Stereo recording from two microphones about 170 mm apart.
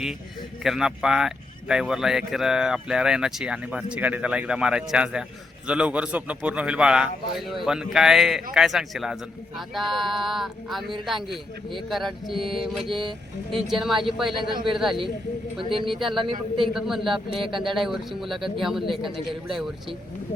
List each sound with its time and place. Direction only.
0.6 s speech: centre (ahead or behind)
14.3 s a man's voice: 30° right (ahead or behind)
14.8 s speech: centre (ahead or behind)
15.7 s a man's voice: 30° right (ahead or behind)
16.0 s speech: centre (ahead or behind)
19.1 s speech: 30° right (ahead or behind)